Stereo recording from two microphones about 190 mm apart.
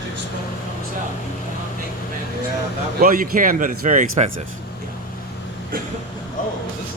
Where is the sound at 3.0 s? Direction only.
50° right (ahead or behind).